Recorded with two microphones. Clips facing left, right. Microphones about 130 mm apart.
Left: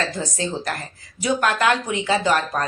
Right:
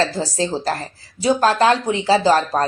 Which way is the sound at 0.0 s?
30° right (ahead or behind).